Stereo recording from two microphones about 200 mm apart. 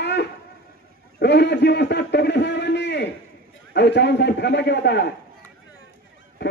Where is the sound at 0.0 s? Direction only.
55° left (ahead or behind).